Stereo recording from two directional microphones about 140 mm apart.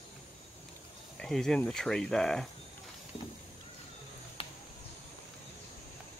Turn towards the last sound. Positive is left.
turn(degrees=45)  # may be behind; listen again after turning